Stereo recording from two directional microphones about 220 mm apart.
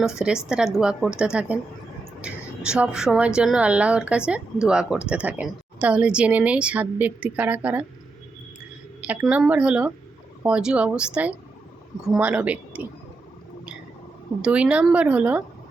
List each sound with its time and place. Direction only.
0.0 s a woman's voice: 5° right (ahead or behind)
9.0 s a woman's voice: 5° right (ahead or behind)
14.4 s a woman's voice: 5° right (ahead or behind)